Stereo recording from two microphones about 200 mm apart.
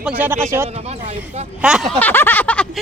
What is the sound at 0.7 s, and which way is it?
Speech, 30° right (ahead or behind).